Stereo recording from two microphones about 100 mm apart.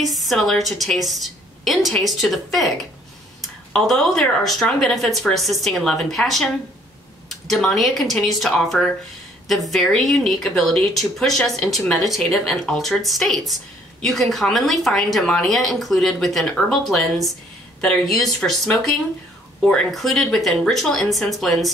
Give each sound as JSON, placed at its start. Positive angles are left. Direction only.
{"t": 0.0, "sound": "speech", "side_deg": 0}